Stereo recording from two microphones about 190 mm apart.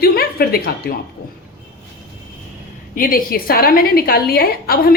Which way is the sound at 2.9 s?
50° left (ahead or behind).